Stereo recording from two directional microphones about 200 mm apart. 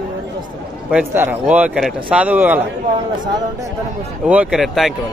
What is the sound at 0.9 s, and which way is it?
A man's voice, 10° right (ahead or behind).